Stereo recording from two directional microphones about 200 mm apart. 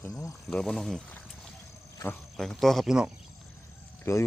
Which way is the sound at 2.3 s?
Centre (ahead or behind).